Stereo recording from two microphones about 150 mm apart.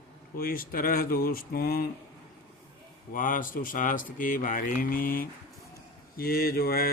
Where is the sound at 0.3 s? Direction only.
75° left (ahead or behind).